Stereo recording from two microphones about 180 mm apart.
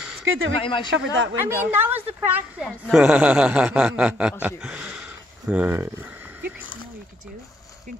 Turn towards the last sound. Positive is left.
turn(degrees=25)  # may be behind; listen again after turning